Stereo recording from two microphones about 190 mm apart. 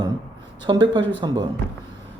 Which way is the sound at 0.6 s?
25° right (ahead or behind).